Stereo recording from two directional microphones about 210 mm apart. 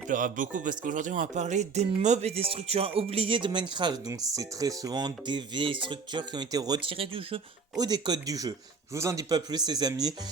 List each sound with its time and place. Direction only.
0.1 s speech: 40° right (ahead or behind); by 10.2 s 20° right (ahead or behind)